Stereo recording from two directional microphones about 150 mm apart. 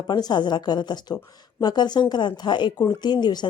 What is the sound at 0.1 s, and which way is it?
A woman's voice, 30° left (ahead or behind).